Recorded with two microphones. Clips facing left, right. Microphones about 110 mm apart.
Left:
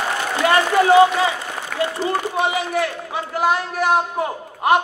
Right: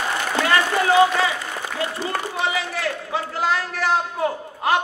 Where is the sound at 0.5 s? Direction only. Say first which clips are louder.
Left 5 dB; 25° left (ahead or behind).